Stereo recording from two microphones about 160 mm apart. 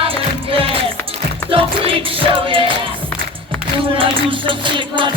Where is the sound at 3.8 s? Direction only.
35° right (ahead or behind).